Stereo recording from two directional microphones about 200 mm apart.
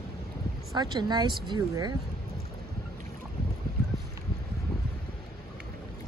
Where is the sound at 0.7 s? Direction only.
20° right (ahead or behind).